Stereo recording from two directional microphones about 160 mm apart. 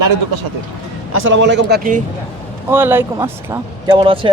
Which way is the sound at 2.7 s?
15° right (ahead or behind).